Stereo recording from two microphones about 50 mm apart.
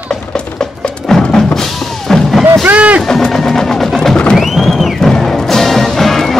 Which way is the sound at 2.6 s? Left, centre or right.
Right.